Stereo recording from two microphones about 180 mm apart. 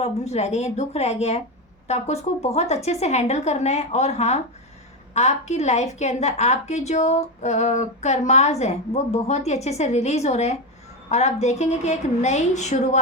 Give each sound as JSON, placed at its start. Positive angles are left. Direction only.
{"t": 0.0, "sound": "a woman's voice", "side_deg": 35}